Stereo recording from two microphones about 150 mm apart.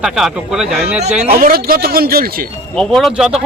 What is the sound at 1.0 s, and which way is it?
Speech, 50° right (ahead or behind).